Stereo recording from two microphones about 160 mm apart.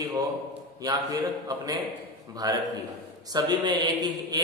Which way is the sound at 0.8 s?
25° right (ahead or behind).